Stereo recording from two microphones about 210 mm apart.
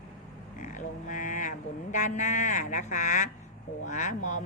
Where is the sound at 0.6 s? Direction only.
35° left (ahead or behind).